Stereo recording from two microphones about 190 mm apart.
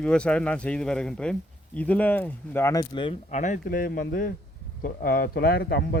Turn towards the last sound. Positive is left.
turn(degrees=55)  # may be behind; listen again after turning